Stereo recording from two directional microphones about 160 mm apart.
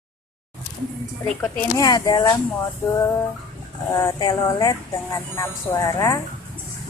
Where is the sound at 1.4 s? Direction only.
20° left (ahead or behind).